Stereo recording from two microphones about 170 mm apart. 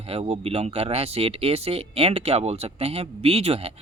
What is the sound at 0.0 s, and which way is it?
Speech, 35° right (ahead or behind).